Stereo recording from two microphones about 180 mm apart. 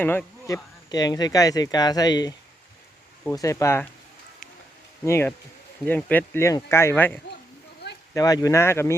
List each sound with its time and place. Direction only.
0.0 s speech: 10° left (ahead or behind)
3.3 s speech: 15° left (ahead or behind)
5.0 s speech: 15° left (ahead or behind)